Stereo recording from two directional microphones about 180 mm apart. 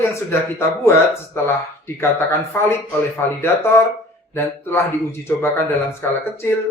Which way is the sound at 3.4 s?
15° left (ahead or behind).